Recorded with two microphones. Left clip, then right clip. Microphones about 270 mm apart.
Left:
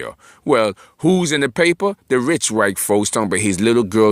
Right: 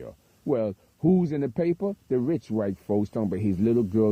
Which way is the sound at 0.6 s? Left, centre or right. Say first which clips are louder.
Left 8 dB; left.